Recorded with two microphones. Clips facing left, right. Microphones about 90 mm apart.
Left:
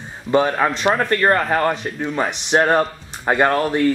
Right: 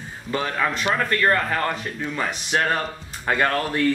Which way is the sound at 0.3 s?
35° left (ahead or behind).